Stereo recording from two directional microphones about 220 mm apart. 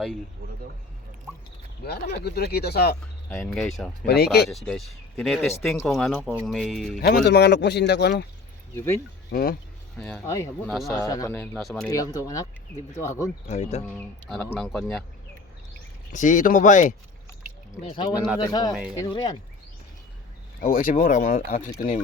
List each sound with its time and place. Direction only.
1.8 s speech: 45° left (ahead or behind)
3.2 s speech: 5° left (ahead or behind)
4.0 s speech: 45° left (ahead or behind)
4.4 s speech: centre (ahead or behind)
7.0 s speech: 45° left (ahead or behind)
8.7 s speech: 10° left (ahead or behind)
9.3 s speech: 40° left (ahead or behind)
10.0 s speech: 5° left (ahead or behind)
11.9 s speech: 15° left (ahead or behind)
13.5 s speech: 30° left (ahead or behind)
13.9 s speech: 5° left (ahead or behind)
16.1 s speech: 35° left (ahead or behind)
17.8 s speech: 20° left (ahead or behind)
20.6 s speech: 40° left (ahead or behind)